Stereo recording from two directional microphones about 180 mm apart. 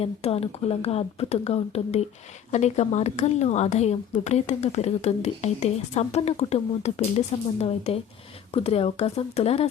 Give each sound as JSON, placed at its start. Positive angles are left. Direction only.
{"t": 0.0, "sound": "speech", "side_deg": 35}